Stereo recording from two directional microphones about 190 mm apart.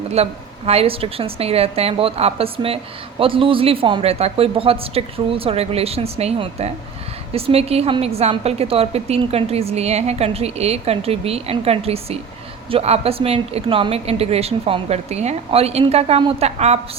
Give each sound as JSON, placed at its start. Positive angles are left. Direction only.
{"t": 0.1, "sound": "a woman's voice", "side_deg": -35}